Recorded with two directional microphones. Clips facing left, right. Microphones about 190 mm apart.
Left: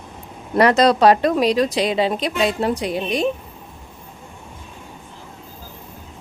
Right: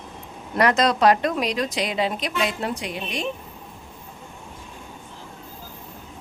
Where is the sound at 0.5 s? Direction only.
30° left (ahead or behind).